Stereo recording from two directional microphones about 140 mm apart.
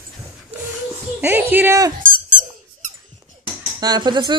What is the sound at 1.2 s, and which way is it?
Speech, 15° right (ahead or behind).